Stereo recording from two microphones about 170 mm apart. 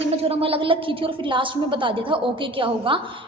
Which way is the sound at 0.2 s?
35° right (ahead or behind).